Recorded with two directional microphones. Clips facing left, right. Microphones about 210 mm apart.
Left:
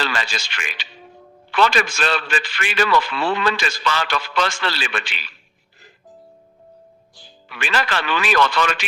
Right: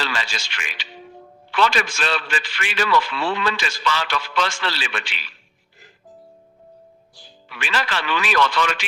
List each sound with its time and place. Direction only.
0.0 s a man's voice: 50° left (ahead or behind)
7.4 s a man's voice: 50° left (ahead or behind)